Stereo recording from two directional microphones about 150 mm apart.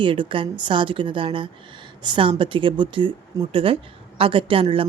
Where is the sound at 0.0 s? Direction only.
35° right (ahead or behind).